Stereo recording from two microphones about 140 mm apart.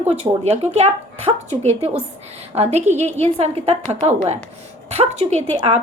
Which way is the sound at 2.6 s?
50° right (ahead or behind).